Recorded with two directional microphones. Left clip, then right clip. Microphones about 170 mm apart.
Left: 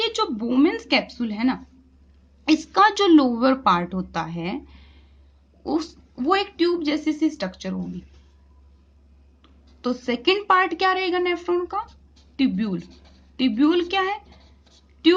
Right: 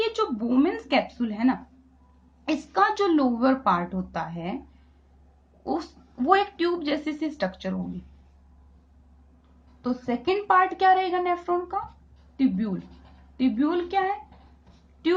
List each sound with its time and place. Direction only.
0.0 s speech: 35° left (ahead or behind)
5.6 s speech: 30° left (ahead or behind)
9.8 s speech: 40° left (ahead or behind)